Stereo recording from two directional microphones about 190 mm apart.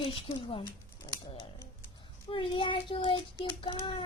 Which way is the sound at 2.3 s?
25° left (ahead or behind).